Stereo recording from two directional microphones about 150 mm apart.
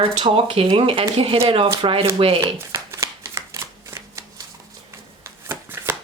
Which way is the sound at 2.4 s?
20° right (ahead or behind).